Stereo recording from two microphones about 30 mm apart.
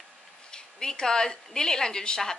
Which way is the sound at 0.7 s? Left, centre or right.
Left.